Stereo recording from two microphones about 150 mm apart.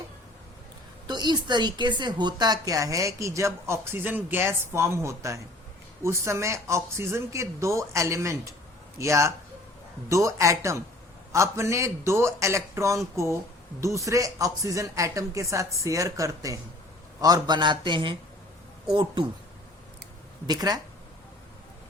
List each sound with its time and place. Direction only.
1.0 s a woman's voice: 30° right (ahead or behind)
20.5 s a woman's voice: 25° right (ahead or behind)